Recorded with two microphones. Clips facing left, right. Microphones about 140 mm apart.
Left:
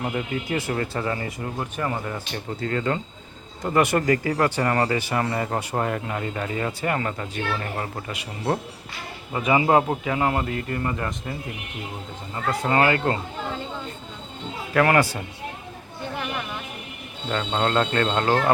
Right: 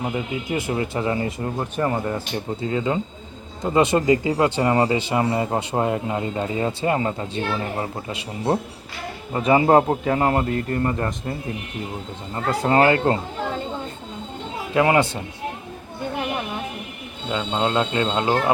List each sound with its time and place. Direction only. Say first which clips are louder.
0.0 s speech: right 1 dB; 10° right (ahead or behind)
2.6 s a man's voice: right 1 dB; 15° right (ahead or behind); by 13.1 s 30° right (ahead or behind)
14.7 s speech: right 1 dB; 20° right (ahead or behind)
17.2 s speech: right 1 dB; 10° right (ahead or behind)